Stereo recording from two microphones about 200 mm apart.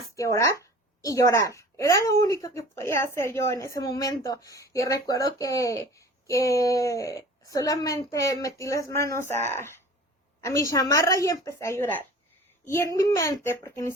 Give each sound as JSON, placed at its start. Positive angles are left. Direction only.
{"t": 0.2, "sound": "a woman's voice", "side_deg": 15}